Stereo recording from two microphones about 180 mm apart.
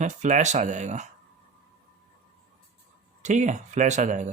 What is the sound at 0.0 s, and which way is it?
Speech, 40° right (ahead or behind).